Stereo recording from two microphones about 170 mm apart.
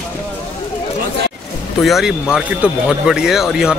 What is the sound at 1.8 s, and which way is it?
Speech, centre (ahead or behind).